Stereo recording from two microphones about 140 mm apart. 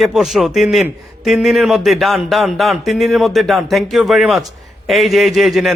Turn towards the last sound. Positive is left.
turn(degrees=0)  # may be behind; listen again after turning